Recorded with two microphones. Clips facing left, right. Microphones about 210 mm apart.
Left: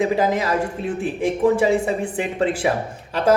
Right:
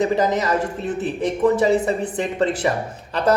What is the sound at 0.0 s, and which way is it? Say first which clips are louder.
A man's voice: even; 10° left (ahead or behind).